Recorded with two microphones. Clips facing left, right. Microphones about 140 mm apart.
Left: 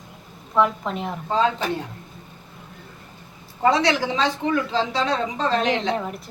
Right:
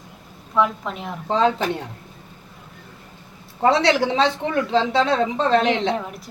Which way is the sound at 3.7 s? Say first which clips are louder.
Right 3 dB; 65° right (ahead or behind).